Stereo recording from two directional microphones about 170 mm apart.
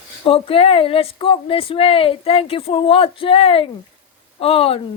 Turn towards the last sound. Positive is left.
turn(degrees=35)  # may be behind; listen again after turning